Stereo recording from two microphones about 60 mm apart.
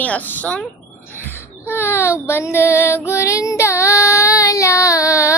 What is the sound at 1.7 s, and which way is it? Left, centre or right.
Speech, left.